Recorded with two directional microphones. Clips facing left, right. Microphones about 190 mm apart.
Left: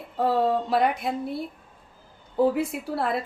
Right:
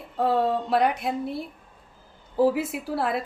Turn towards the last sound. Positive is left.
turn(degrees=0)  # may be behind; listen again after turning